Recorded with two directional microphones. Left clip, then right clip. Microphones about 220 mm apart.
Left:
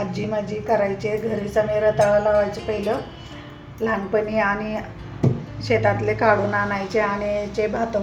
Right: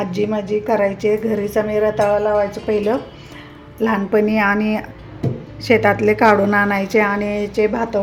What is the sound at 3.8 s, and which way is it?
A woman's voice, 50° right (ahead or behind).